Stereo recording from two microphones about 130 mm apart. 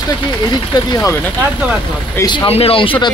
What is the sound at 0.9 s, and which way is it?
Speech, 25° left (ahead or behind).